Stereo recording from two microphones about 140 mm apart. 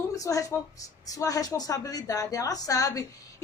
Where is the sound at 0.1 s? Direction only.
25° left (ahead or behind).